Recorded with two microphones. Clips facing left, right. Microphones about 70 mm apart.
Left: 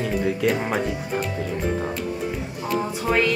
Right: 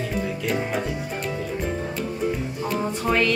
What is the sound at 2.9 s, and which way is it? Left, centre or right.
Music, centre.